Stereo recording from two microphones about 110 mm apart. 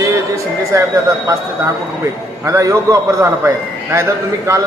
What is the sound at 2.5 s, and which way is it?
Speech, 30° right (ahead or behind).